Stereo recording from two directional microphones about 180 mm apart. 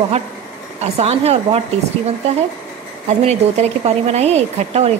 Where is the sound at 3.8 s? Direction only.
35° right (ahead or behind).